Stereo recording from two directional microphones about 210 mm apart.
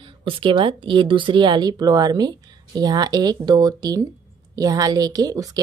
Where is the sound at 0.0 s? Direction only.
25° right (ahead or behind).